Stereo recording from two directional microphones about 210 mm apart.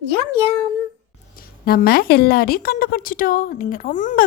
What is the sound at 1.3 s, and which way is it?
A woman's voice, 45° left (ahead or behind).